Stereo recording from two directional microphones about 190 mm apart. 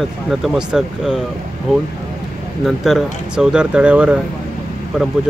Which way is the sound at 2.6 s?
Centre (ahead or behind).